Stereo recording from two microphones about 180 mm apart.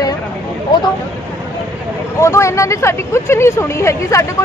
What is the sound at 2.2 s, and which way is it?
Speech, 15° left (ahead or behind).